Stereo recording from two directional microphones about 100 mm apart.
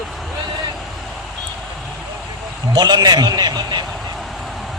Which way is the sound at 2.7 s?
45° right (ahead or behind).